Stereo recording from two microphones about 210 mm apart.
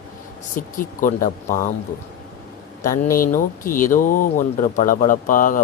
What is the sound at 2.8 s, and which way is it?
Speech, 40° left (ahead or behind).